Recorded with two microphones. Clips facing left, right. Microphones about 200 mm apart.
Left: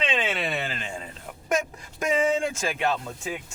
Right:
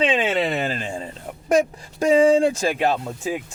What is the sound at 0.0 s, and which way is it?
Speech, 40° right (ahead or behind).